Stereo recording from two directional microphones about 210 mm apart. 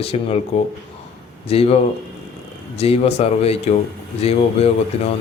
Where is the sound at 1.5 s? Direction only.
30° left (ahead or behind).